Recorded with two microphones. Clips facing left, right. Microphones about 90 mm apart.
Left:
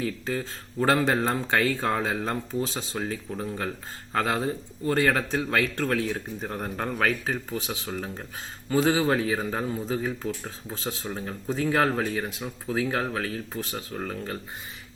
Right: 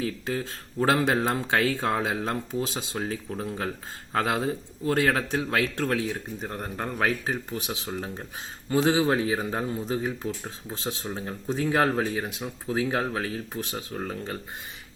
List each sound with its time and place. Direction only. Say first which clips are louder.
0.3 s a man's voice: even; 5° right (ahead or behind)
2.6 s speech: even; 20° right (ahead or behind)
4.8 s a man's voice: left 1 dB; 5° right (ahead or behind); by 14.3 s 20° right (ahead or behind)